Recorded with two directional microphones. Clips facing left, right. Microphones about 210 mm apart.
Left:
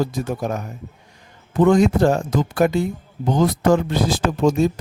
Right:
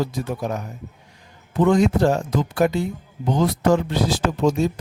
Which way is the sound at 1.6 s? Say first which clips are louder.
Left 2 dB; 50° left (ahead or behind).